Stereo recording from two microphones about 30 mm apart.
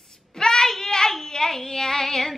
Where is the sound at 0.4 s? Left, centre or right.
Left.